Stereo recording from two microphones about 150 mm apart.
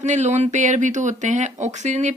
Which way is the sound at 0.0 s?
50° right (ahead or behind).